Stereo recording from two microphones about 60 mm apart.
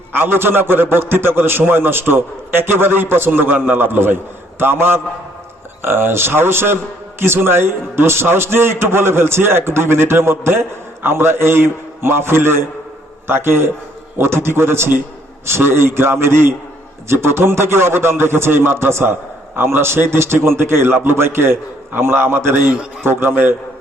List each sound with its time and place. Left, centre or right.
0.1 s a man's voice: right